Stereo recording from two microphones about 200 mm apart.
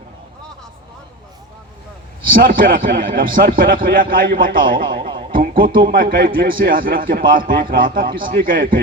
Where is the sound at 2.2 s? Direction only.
45° right (ahead or behind).